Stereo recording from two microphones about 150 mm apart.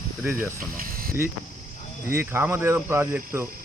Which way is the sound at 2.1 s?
15° right (ahead or behind).